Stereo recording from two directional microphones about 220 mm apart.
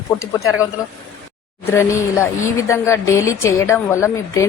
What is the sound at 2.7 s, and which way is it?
Speech, 15° left (ahead or behind).